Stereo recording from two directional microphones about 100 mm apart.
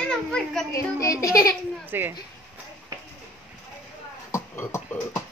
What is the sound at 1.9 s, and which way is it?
Speech, 20° right (ahead or behind).